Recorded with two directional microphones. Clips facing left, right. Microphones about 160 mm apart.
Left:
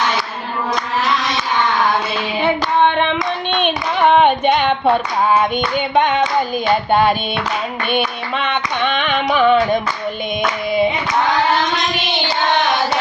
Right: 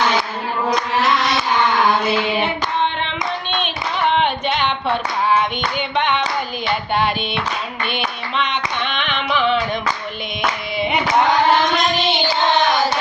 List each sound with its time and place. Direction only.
3.6 s clapping: 50° left (ahead or behind)
5.9 s clapping: 45° left (ahead or behind)
7.9 s hands: 50° left (ahead or behind)